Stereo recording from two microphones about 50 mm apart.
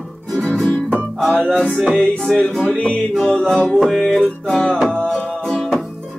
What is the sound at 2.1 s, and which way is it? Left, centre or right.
Music, centre.